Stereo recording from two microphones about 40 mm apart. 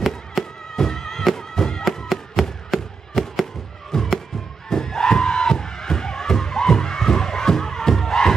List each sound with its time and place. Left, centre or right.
0.3 s music: centre
2.4 s a sound: centre
3.9 s music: centre